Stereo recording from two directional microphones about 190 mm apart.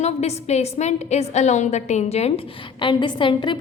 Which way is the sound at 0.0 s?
35° left (ahead or behind).